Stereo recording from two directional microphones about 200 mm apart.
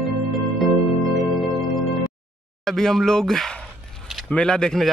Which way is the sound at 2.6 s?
Centre (ahead or behind).